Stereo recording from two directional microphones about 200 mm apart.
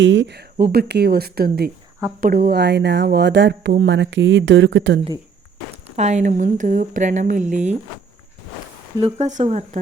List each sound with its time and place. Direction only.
0.0 s speech: 65° right (ahead or behind)
0.6 s speech: 50° right (ahead or behind); by 4.9 s 65° right (ahead or behind)
5.7 s speech: 35° right (ahead or behind)
9.0 s speech: 30° right (ahead or behind)